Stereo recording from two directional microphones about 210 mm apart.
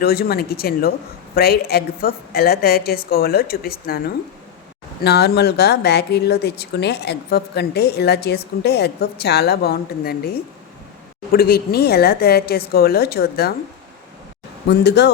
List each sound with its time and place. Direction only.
0.0 s speech: 45° left (ahead or behind)
14.7 s speech: 55° left (ahead or behind)